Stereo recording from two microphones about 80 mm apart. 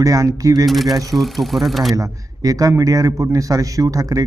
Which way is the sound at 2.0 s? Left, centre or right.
Right.